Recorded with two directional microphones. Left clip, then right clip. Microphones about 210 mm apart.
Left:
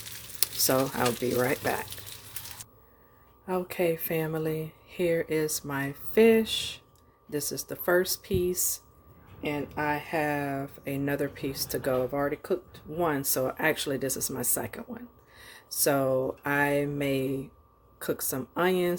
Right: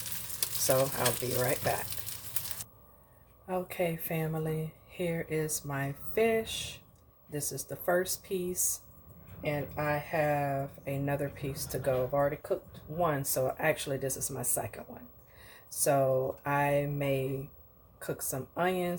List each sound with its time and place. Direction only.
0.9 s speech: 45° left (ahead or behind)
3.4 s speech: 40° left (ahead or behind)
9.4 s speech: 50° left (ahead or behind)